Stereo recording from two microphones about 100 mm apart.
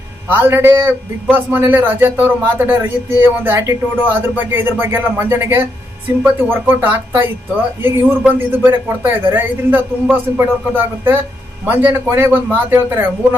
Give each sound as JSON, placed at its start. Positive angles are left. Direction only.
{"t": 0.3, "sound": "a man's voice", "side_deg": -20}